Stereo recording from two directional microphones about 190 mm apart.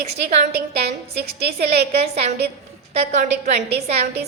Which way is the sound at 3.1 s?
35° right (ahead or behind).